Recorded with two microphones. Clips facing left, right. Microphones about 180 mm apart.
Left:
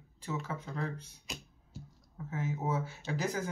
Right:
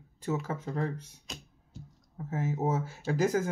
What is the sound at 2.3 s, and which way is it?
Speech, 45° right (ahead or behind).